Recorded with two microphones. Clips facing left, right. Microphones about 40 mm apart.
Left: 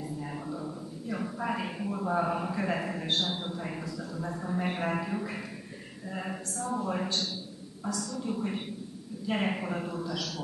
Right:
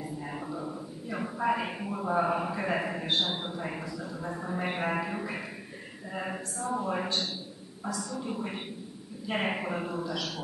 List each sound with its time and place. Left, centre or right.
0.0 s a man's voice: centre